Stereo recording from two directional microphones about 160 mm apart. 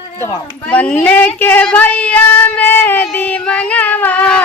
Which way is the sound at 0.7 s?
10° left (ahead or behind).